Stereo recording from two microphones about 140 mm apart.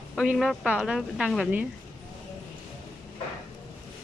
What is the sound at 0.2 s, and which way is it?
A woman's voice, 5° right (ahead or behind).